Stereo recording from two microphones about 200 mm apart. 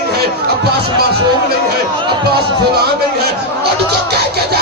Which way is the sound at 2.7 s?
50° right (ahead or behind).